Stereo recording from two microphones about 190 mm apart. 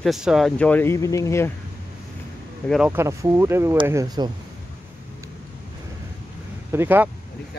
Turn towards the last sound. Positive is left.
turn(degrees=-10)  # may be behind; listen again after turning